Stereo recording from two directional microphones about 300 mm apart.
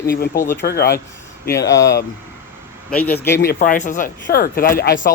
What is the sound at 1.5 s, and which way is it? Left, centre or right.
Speech, centre.